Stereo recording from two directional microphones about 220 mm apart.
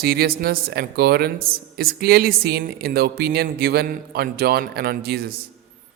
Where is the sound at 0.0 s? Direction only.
45° right (ahead or behind).